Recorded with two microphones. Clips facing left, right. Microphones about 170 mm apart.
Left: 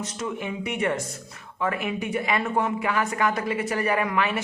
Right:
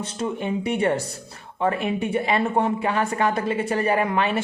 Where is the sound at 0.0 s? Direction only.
30° right (ahead or behind).